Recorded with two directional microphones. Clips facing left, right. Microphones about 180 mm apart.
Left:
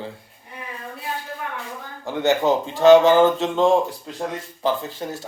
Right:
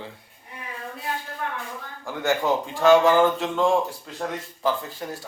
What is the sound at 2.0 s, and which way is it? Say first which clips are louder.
Speech: left 5 dB; 25° left (ahead or behind).